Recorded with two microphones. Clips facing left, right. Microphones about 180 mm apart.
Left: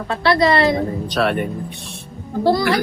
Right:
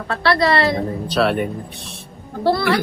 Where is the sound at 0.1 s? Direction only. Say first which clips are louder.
Left 1 dB; 20° left (ahead or behind).